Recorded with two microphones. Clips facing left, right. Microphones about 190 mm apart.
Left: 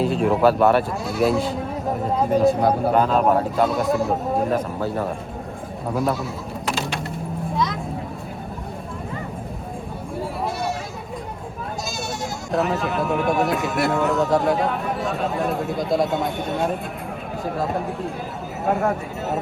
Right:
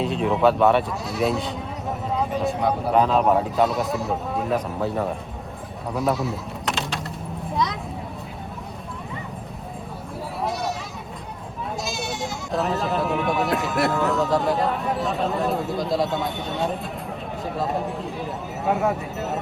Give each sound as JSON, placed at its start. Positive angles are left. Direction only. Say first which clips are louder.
{"t": 0.0, "sound": "speech", "louder": "left 2 dB", "side_deg": 0}
{"t": 2.6, "sound": "speech", "louder": "left 4 dB", "side_deg": 35}
{"t": 2.9, "sound": "speech", "louder": "right 3 dB", "side_deg": 0}
{"t": 7.5, "sound": "a sound", "louder": "even", "side_deg": 0}
{"t": 11.9, "sound": "speech", "louder": "even", "side_deg": 0}
{"t": 18.6, "sound": "speech", "louder": "left 1 dB", "side_deg": 0}